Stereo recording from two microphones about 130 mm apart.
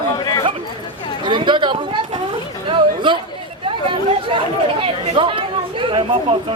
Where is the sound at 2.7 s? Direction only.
40° right (ahead or behind).